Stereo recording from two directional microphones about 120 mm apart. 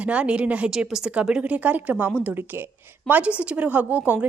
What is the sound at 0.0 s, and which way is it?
A woman's voice, 10° right (ahead or behind).